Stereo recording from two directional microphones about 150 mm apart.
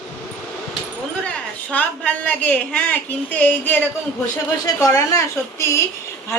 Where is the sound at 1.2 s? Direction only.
10° left (ahead or behind).